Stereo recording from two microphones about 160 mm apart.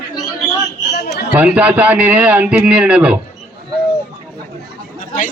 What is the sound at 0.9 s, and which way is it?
Chatter, 90° left.